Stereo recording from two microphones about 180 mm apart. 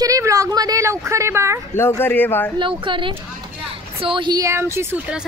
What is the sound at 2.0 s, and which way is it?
Speech, 10° left (ahead or behind).